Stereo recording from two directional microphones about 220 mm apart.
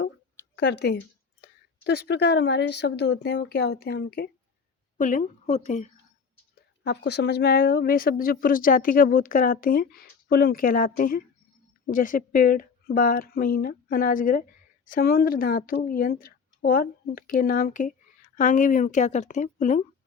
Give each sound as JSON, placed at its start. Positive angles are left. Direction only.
{"t": 0.5, "sound": "a woman's voice", "side_deg": 50}
{"t": 4.9, "sound": "a woman's voice", "side_deg": 35}
{"t": 6.6, "sound": "a woman's voice", "side_deg": 50}